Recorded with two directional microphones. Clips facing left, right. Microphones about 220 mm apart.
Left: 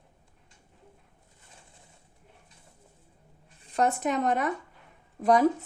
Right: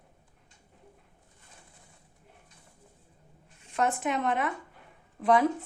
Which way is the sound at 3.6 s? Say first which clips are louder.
Left 2 dB; 35° left (ahead or behind).